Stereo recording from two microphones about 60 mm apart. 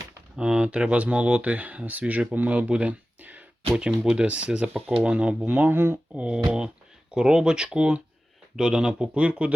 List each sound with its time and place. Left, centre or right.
0.3 s speech: centre
4.0 s speech: centre
5.7 s speech: right
6.1 s speech: centre